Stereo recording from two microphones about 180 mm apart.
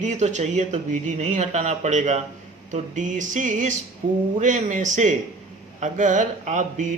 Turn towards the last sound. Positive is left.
turn(degrees=-45)  # may be behind; listen again after turning